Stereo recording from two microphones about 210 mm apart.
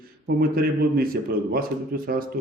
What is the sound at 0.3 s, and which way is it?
A man's voice, 45° right (ahead or behind).